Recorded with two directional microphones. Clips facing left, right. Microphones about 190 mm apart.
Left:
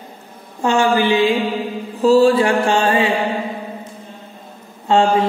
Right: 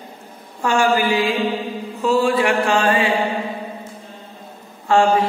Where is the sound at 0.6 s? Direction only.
25° left (ahead or behind).